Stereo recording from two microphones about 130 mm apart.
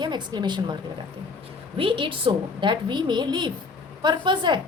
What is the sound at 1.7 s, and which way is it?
A woman's voice, 45° right (ahead or behind).